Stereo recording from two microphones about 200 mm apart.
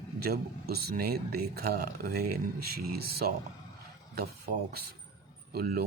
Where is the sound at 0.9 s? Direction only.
50° right (ahead or behind).